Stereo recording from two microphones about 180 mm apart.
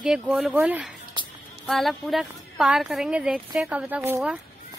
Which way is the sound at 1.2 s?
25° right (ahead or behind).